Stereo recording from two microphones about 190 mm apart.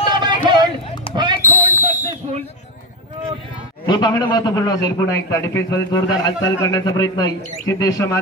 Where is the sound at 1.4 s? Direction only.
45° right (ahead or behind).